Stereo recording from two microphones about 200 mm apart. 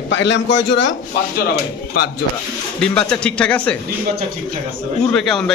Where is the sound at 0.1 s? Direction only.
65° left (ahead or behind).